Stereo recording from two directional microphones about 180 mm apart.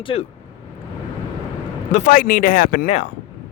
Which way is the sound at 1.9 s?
45° left (ahead or behind).